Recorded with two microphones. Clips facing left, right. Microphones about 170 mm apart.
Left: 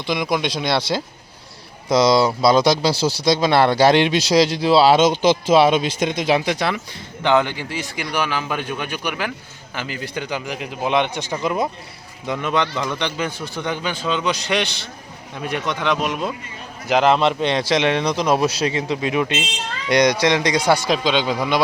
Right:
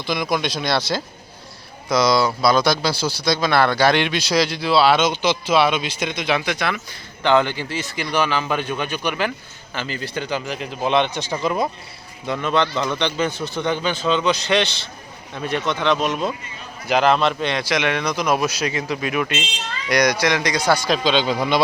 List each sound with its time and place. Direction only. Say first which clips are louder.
0.0 s a man's voice: left 1 dB; 25° left (ahead or behind)
2.9 s speech: left 4 dB; 90° left
3.3 s a man's voice: left 1 dB; 25° left (ahead or behind)
6.7 s speech: left 4 dB; 15° left (ahead or behind)
16.9 s a man's voice: left 1 dB; 20° left (ahead or behind)